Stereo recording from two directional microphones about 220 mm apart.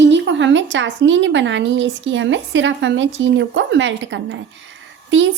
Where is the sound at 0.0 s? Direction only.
55° right (ahead or behind).